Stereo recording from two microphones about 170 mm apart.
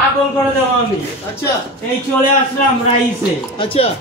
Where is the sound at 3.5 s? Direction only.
35° left (ahead or behind).